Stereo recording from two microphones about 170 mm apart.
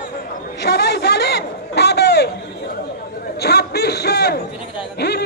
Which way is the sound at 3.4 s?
70° left (ahead or behind).